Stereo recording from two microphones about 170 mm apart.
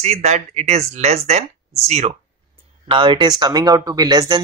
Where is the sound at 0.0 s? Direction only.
40° right (ahead or behind).